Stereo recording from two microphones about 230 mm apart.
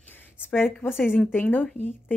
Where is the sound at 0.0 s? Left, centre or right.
Centre.